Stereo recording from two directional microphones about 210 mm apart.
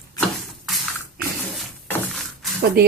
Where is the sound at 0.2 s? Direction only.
Centre (ahead or behind).